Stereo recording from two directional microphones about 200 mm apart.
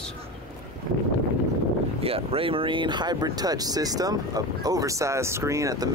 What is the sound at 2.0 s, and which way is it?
Speech, 30° right (ahead or behind).